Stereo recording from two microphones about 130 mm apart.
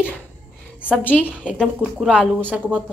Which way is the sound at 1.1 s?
10° right (ahead or behind).